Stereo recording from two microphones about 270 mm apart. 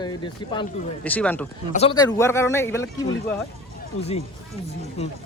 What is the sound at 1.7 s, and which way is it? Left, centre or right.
Speech, centre.